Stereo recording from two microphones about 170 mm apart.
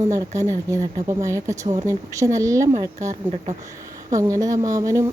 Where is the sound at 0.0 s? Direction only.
20° right (ahead or behind).